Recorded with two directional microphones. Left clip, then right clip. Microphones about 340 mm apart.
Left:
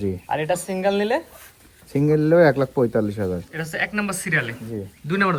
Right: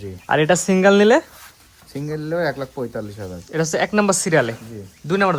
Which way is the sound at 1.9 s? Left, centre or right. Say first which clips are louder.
Left 8 dB; centre.